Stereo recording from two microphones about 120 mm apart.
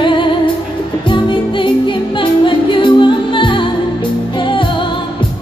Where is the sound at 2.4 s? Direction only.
45° left (ahead or behind).